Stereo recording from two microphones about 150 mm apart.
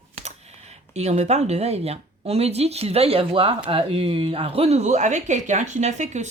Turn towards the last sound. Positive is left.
turn(degrees=-50)  # may be behind; listen again after turning